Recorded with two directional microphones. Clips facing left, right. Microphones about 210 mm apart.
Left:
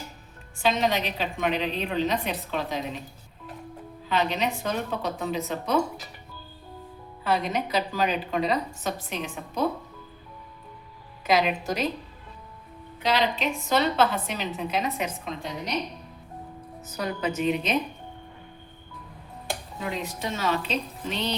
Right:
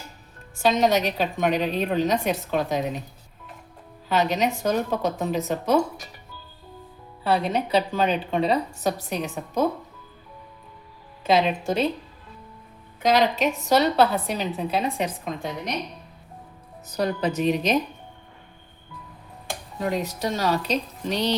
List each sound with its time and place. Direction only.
0.6 s a woman's voice: 40° right (ahead or behind)
4.1 s a woman's voice: 45° right (ahead or behind)
7.3 s a woman's voice: 30° right (ahead or behind)
11.3 s a woman's voice: 25° right (ahead or behind)
13.0 s a woman's voice: 45° right (ahead or behind)
16.9 s a woman's voice: 35° right (ahead or behind)
19.8 s a woman's voice: 40° right (ahead or behind)